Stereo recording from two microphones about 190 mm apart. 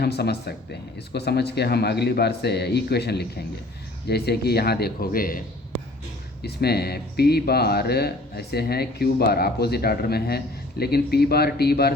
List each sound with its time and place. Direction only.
0.0 s speech: 60° left (ahead or behind)
6.4 s speech: 55° left (ahead or behind)